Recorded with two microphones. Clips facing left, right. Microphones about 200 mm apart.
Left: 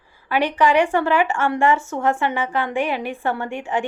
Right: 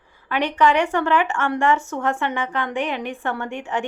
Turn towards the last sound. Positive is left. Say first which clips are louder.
# left 2 dB
turn(degrees=10)  # may be behind; listen again after turning